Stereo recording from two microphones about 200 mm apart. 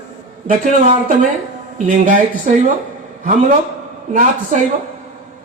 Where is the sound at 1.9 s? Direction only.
40° right (ahead or behind).